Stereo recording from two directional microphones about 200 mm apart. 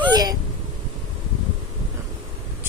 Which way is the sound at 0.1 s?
20° right (ahead or behind).